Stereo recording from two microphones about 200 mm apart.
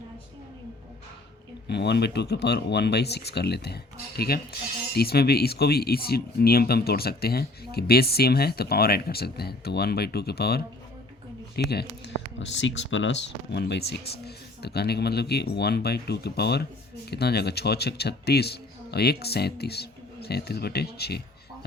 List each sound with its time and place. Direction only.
1.6 s speech: 55° left (ahead or behind)
4.9 s speech: 50° left (ahead or behind)
11.7 s speech: 55° left (ahead or behind)
12.5 s speech: 65° left (ahead or behind)